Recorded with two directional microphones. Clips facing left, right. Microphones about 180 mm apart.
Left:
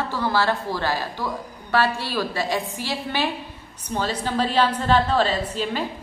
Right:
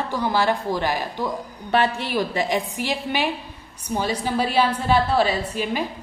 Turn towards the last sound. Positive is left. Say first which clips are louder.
# right 1 dB
turn(degrees=-10)  # may be behind; listen again after turning